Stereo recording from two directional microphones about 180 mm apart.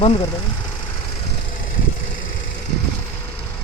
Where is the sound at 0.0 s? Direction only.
30° left (ahead or behind).